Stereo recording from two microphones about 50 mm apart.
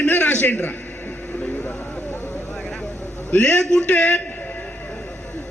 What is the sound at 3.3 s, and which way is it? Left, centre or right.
Speech, left.